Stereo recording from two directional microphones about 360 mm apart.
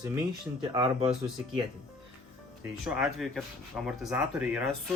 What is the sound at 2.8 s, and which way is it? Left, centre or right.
Speech, centre.